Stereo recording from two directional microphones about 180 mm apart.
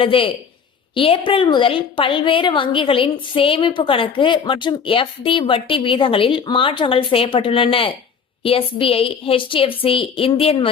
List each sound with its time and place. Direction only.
0.0 s a woman's voice: 30° left (ahead or behind)